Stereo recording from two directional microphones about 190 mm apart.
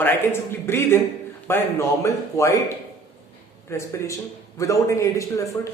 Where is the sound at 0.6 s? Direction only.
15° left (ahead or behind).